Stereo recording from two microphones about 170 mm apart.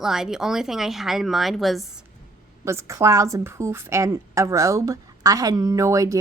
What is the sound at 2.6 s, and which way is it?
A woman's voice, 15° right (ahead or behind).